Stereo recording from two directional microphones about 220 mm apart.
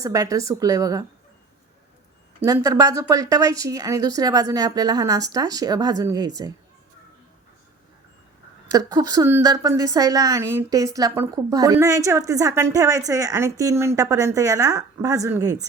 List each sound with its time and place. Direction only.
0.0 s a woman's voice: 15° right (ahead or behind)
2.4 s a woman's voice: 15° right (ahead or behind)
8.7 s a woman's voice: 15° right (ahead or behind)